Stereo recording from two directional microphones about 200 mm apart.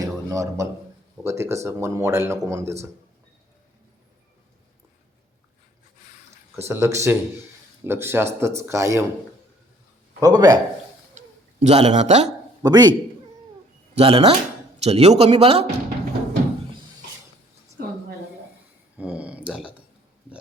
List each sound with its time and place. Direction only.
0.0 s a sound: 15° right (ahead or behind)
1.2 s speech: 15° right (ahead or behind)
6.7 s speech: 15° right (ahead or behind)
10.2 s a man's voice: 20° right (ahead or behind)
11.6 s a man's voice: 35° right (ahead or behind)
12.6 s a man's voice: 20° right (ahead or behind)
13.9 s a man's voice: 30° right (ahead or behind)
17.8 s a sound: 50° right (ahead or behind)
18.9 s a sound: 5° right (ahead or behind)